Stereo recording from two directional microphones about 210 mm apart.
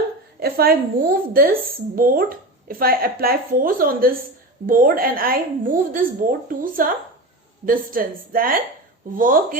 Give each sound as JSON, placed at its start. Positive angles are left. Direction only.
{"t": 0.3, "sound": "a woman's voice", "side_deg": -45}